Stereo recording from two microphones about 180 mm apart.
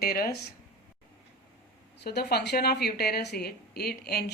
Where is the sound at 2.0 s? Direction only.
65° left (ahead or behind).